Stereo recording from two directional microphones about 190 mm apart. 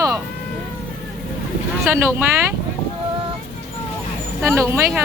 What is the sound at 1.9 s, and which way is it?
Speech, 10° right (ahead or behind).